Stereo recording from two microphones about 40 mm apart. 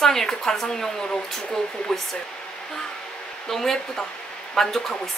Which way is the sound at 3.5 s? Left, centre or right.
Centre.